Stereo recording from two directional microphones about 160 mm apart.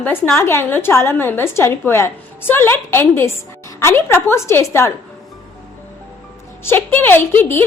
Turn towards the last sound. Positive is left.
turn(degrees=15)  # may be behind; listen again after turning